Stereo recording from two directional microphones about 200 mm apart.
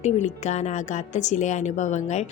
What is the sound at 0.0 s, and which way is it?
Speech, 35° left (ahead or behind).